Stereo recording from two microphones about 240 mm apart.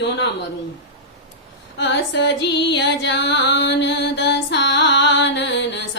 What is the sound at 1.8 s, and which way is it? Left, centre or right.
Music, left.